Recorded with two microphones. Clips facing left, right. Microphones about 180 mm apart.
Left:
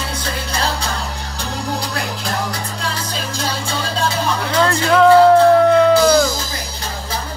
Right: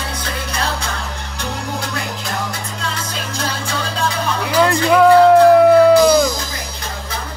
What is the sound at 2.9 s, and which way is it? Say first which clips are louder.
Music: left 1 dB; 30° left (ahead or behind).